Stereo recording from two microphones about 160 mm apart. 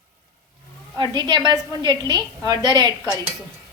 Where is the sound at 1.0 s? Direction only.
25° right (ahead or behind).